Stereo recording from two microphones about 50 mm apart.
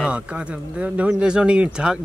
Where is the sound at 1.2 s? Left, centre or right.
Centre.